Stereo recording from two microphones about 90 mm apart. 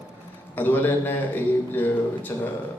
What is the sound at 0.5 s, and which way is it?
A man's voice, 20° left (ahead or behind).